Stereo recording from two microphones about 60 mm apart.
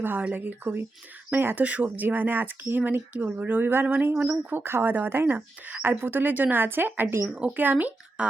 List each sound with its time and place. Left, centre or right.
0.0 s speech: right
7.3 s speech: centre
7.5 s speech: right